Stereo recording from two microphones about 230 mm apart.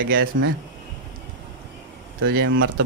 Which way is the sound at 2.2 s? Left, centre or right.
Right.